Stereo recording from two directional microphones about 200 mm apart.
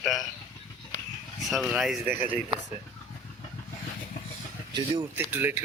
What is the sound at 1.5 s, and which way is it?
Speech, centre (ahead or behind).